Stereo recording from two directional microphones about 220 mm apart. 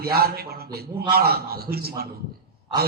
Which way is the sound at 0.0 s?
45° right (ahead or behind).